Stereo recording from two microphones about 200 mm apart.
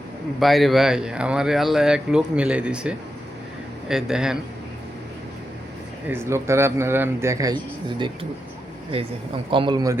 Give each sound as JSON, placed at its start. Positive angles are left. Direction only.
{"t": 0.3, "sound": "speech", "side_deg": 0}
{"t": 6.1, "sound": "a man's voice", "side_deg": -10}
{"t": 9.5, "sound": "speech", "side_deg": -25}